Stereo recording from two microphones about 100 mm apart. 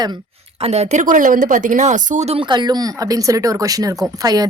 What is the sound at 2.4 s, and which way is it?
Speech, 45° right (ahead or behind).